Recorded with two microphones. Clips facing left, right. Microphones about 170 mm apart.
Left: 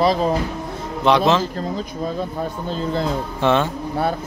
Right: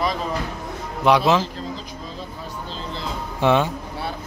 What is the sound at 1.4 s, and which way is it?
Speech, 50° left (ahead or behind).